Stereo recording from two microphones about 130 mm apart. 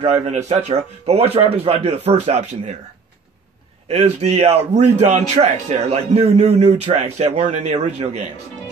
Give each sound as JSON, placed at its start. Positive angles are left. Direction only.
{"t": 0.0, "sound": "speech", "side_deg": -55}
{"t": 3.9, "sound": "a man's voice", "side_deg": -55}